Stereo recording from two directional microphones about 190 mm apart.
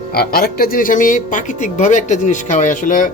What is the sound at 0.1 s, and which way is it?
A man's voice, 55° left (ahead or behind).